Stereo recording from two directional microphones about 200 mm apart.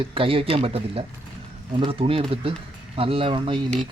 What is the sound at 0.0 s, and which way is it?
Speech, 25° right (ahead or behind).